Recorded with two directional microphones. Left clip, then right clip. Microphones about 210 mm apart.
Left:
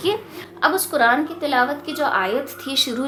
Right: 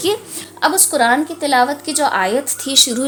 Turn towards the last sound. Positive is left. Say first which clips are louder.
# right 7 dB
turn(degrees=-30)  # may be behind; listen again after turning